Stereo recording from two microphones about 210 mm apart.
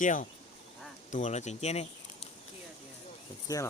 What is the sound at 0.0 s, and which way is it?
Speech, 40° left (ahead or behind).